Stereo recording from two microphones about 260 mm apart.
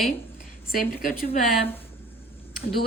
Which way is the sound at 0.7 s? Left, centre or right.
Left.